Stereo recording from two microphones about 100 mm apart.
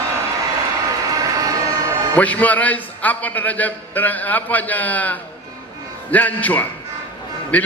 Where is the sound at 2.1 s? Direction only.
15° left (ahead or behind).